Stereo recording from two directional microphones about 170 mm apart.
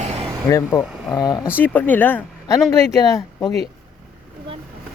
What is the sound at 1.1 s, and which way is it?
Speech, 25° left (ahead or behind).